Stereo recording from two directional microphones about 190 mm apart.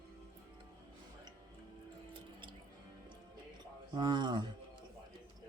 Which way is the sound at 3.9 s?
20° right (ahead or behind).